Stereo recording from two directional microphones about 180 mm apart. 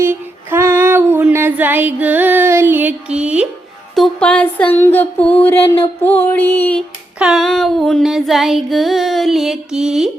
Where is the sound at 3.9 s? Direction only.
5° left (ahead or behind).